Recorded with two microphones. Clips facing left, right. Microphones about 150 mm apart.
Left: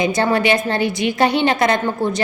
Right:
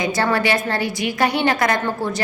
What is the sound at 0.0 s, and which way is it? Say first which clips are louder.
A woman's voice: left 3 dB; 20° left (ahead or behind).